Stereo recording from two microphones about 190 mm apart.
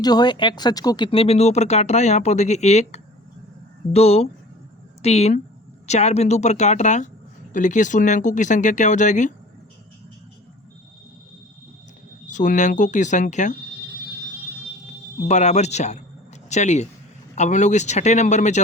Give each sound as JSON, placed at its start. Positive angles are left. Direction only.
{"t": 0.0, "sound": "speech", "side_deg": 20}
{"t": 12.3, "sound": "speech", "side_deg": 40}
{"t": 15.3, "sound": "speech", "side_deg": 35}